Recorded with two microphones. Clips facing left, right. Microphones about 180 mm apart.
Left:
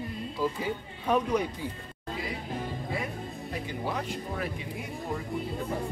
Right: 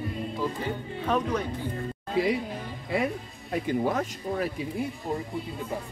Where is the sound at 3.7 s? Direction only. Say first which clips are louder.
Right 8 dB; 45° right (ahead or behind).